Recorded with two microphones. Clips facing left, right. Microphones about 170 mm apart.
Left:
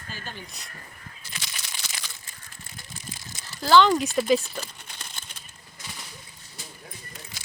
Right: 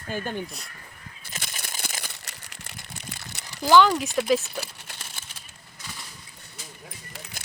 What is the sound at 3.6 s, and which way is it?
Speech, 15° right (ahead or behind).